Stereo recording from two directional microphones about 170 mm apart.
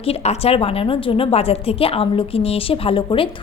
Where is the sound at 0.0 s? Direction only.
35° left (ahead or behind).